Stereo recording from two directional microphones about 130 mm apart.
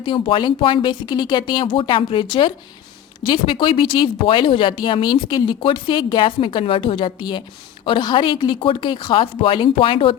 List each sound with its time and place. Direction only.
0.0 s speech: 40° left (ahead or behind)